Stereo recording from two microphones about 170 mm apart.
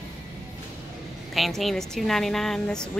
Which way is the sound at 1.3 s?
Centre (ahead or behind).